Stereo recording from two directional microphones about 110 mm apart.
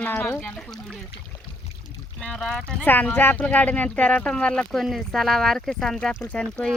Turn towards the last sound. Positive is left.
turn(degrees=5)  # may be behind; listen again after turning